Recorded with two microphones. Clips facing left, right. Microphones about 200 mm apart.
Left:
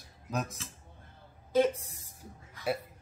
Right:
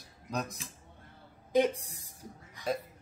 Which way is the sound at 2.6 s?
15° right (ahead or behind).